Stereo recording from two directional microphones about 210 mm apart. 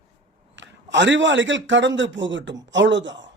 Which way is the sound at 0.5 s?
60° right (ahead or behind).